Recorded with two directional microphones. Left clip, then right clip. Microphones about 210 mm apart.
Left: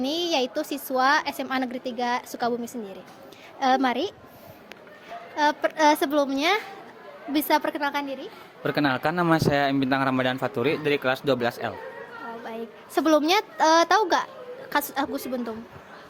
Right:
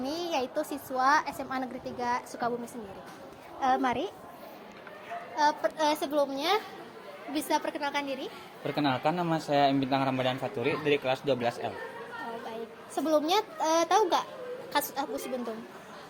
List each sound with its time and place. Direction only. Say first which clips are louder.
0.0 s a man's voice: left 7 dB; 45° left (ahead or behind)
3.6 s a woman's voice: left 5 dB; 40° left (ahead or behind)
5.4 s a man's voice: left 5 dB; 45° left (ahead or behind)
8.6 s a man's voice: left 4 dB; 50° left (ahead or behind)
12.9 s a man's voice: left 6 dB; 45° left (ahead or behind)